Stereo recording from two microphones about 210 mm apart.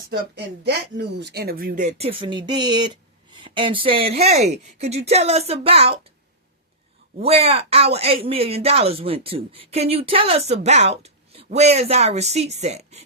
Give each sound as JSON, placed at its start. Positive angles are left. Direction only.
{"t": 0.1, "sound": "speech", "side_deg": -50}
{"t": 7.2, "sound": "speech", "side_deg": -30}